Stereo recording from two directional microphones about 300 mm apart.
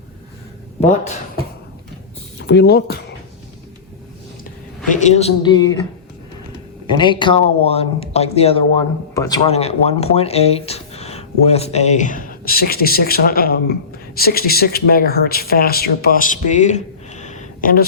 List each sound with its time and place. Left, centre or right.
0.8 s speech: left
2.4 s speech: left
4.9 s speech: left
6.8 s speech: centre